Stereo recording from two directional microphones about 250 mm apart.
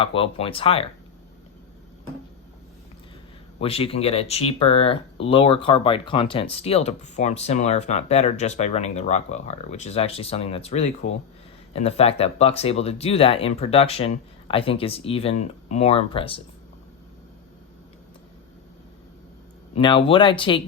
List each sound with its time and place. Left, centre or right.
0.0 s speech: left
3.6 s speech: left
19.7 s speech: centre